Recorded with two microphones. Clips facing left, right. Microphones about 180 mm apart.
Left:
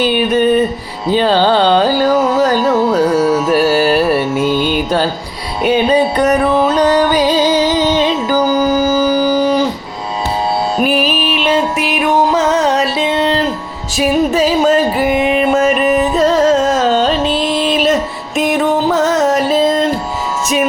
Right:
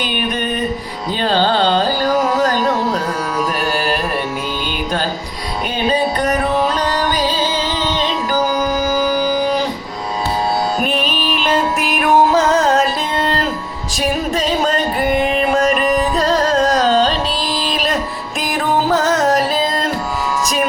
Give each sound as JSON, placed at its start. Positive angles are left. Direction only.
{"t": 4.4, "sound": "music", "side_deg": 45}
{"t": 6.7, "sound": "music", "side_deg": 10}
{"t": 10.8, "sound": "music", "side_deg": 5}
{"t": 13.9, "sound": "music", "side_deg": 5}
{"t": 18.9, "sound": "music", "side_deg": 0}